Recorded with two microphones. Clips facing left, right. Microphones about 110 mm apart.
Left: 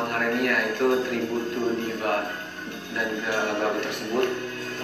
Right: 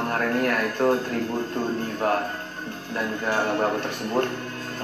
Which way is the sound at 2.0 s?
35° right (ahead or behind).